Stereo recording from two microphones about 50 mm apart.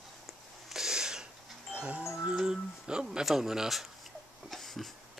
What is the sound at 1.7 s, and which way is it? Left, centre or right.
Livestock, right.